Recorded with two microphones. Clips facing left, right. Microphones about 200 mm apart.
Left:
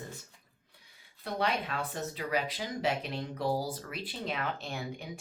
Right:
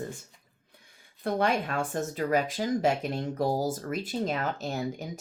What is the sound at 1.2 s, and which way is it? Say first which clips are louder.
Speech: right 6 dB; 50° right (ahead or behind).